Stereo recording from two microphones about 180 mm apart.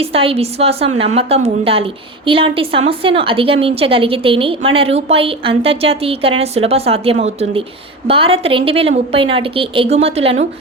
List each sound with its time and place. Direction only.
0.0 s a woman's voice: 30° right (ahead or behind)